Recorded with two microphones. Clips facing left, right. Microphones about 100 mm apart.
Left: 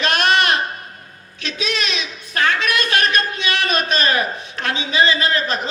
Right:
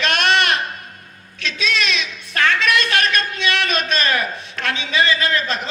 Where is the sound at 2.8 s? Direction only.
40° left (ahead or behind).